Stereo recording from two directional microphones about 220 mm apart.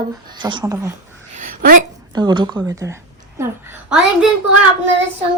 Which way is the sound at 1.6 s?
40° right (ahead or behind).